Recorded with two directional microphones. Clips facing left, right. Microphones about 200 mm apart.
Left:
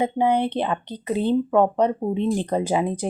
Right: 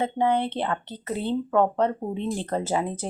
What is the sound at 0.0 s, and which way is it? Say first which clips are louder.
Speech: left 3 dB; 15° left (ahead or behind).